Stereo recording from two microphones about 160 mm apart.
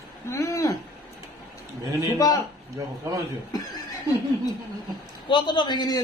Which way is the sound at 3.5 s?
25° left (ahead or behind).